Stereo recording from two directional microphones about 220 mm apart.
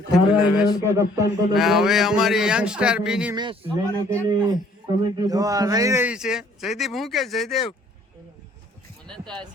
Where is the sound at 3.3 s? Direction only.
20° right (ahead or behind).